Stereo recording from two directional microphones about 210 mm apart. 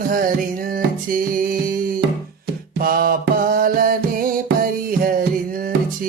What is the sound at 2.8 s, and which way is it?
Music, 45° right (ahead or behind).